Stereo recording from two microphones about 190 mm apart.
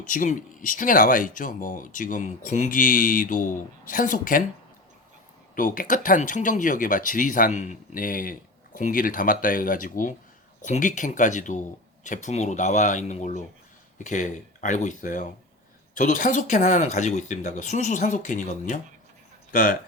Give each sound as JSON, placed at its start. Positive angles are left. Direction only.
{"t": 0.0, "sound": "speech", "side_deg": 45}
{"t": 5.5, "sound": "speech", "side_deg": 45}